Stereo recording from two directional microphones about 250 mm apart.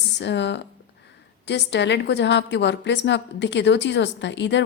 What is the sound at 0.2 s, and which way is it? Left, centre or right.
Speech, left.